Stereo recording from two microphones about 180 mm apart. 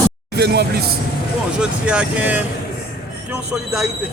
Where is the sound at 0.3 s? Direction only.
65° right (ahead or behind).